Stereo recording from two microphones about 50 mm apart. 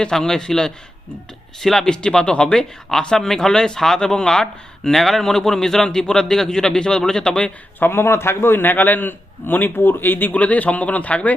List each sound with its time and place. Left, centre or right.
0.0 s speech: centre
7.8 s a man's voice: left